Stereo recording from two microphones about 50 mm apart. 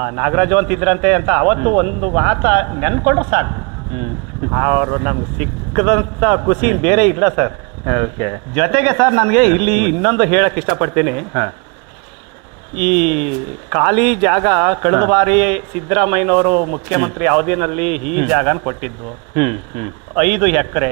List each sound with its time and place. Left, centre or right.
0.0 s speech: centre
4.6 s speech: centre
5.4 s speech: centre
12.7 s speech: left